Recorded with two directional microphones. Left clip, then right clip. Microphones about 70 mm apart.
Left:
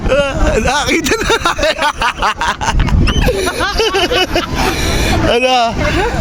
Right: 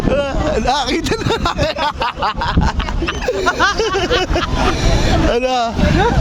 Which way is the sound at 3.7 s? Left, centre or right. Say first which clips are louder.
Left 3 dB; left.